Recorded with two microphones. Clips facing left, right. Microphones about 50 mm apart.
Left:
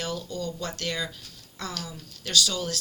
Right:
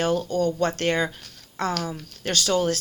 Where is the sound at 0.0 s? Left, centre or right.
Right.